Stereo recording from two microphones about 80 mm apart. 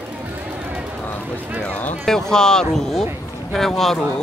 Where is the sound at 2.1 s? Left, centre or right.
Centre.